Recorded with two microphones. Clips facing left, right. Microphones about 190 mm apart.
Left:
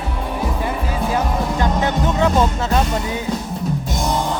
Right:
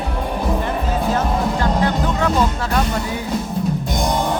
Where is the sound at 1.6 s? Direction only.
20° left (ahead or behind).